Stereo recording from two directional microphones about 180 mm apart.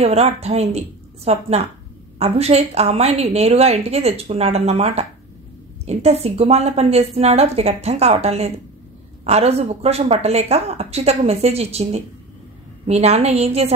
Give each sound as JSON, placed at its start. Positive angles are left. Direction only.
{"t": 0.0, "sound": "a woman's voice", "side_deg": -35}